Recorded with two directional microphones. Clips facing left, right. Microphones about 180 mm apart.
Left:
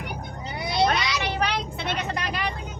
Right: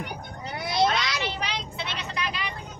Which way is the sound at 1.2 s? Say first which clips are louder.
Left 5 dB; 55° left (ahead or behind).